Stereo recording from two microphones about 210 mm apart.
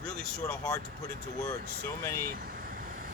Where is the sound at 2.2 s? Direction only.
45° right (ahead or behind).